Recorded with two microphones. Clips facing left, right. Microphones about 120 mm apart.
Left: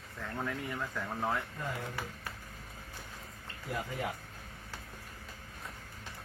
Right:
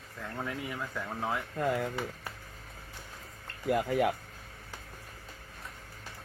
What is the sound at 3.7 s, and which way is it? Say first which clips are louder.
Speech: right 10 dB; 65° right (ahead or behind).